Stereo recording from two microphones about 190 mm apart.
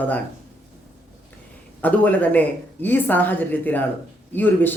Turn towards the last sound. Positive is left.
turn(degrees=10)  # may be behind; listen again after turning